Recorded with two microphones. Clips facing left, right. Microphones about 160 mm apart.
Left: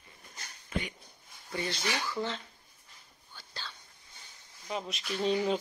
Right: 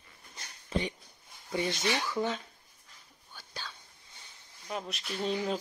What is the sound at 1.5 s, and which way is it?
Speech, 20° right (ahead or behind).